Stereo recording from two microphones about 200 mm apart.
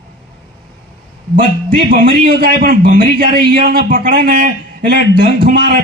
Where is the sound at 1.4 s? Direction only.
45° right (ahead or behind).